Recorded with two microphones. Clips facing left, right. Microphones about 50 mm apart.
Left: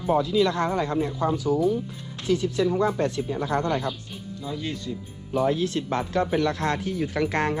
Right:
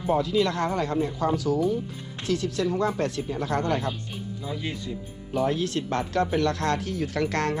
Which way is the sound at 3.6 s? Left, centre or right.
Right.